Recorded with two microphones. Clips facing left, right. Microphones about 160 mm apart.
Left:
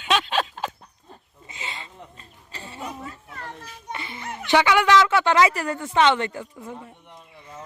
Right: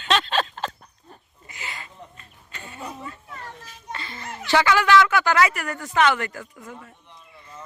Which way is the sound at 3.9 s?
20° left (ahead or behind).